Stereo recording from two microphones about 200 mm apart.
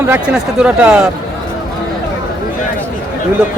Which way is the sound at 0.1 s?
5° right (ahead or behind).